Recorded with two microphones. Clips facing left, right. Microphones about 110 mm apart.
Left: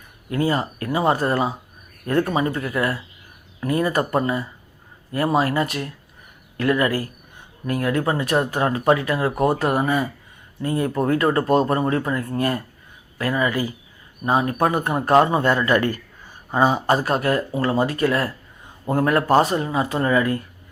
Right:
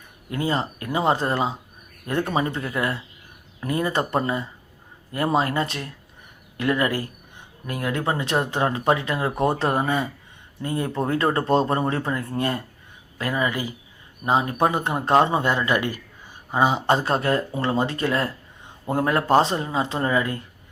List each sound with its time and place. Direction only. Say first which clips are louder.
0.3 s a man's voice: left 3 dB; 25° right (ahead or behind)